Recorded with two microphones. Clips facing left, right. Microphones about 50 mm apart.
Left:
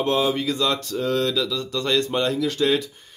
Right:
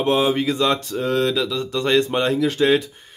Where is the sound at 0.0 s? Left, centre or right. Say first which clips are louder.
Right 3 dB; right.